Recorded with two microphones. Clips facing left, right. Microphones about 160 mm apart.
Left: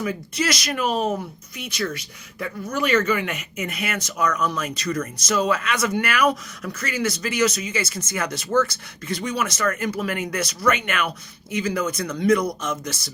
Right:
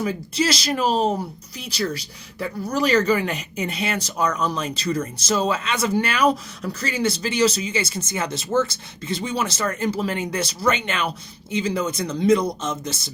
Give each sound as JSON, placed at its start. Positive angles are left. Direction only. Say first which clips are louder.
{"t": 0.0, "sound": "speech", "louder": "right 2 dB", "side_deg": -30}